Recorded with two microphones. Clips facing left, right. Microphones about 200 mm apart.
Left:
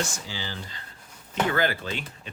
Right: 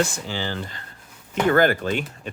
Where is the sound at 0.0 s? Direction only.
55° right (ahead or behind).